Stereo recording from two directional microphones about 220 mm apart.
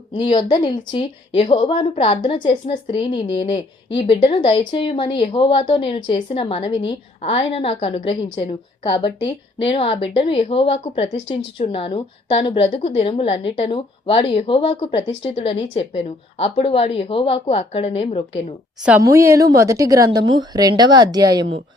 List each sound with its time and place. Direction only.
0.1 s a woman's voice: 20° left (ahead or behind)
18.9 s a woman's voice: 15° right (ahead or behind)